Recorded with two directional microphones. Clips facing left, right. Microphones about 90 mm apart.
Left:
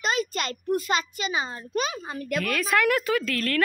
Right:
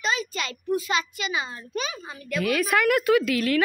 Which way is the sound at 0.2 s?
55° left (ahead or behind).